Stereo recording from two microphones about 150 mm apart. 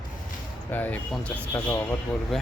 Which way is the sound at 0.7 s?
10° left (ahead or behind).